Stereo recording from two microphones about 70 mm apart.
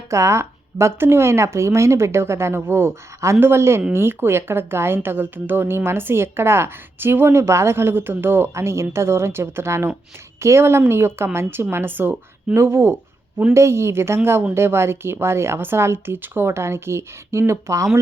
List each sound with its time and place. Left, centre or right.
0.1 s speech: right